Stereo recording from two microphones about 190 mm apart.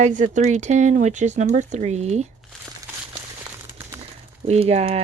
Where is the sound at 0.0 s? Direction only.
40° right (ahead or behind).